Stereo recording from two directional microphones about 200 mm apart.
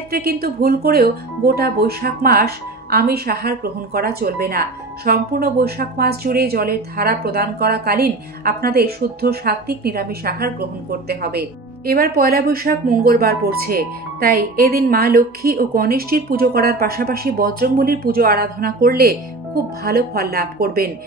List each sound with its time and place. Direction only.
0.1 s speech: 50° right (ahead or behind)